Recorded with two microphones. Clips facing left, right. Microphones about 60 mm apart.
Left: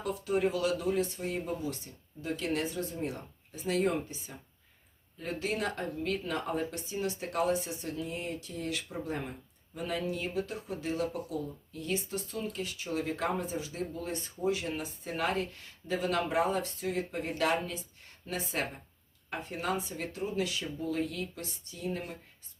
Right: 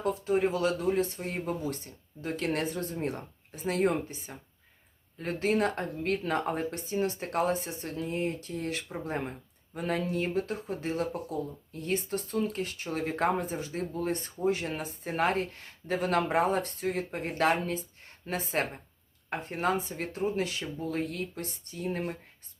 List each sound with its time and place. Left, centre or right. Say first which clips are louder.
0.0 s speech: right 3 dB; right